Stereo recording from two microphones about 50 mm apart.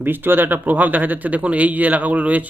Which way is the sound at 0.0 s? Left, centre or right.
Right.